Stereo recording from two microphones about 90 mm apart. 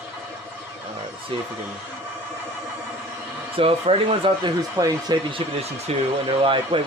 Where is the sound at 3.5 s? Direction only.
90° right.